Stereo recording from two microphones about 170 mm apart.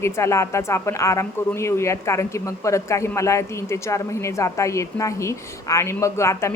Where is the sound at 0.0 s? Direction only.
15° left (ahead or behind).